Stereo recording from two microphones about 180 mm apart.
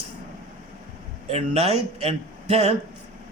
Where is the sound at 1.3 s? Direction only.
35° right (ahead or behind).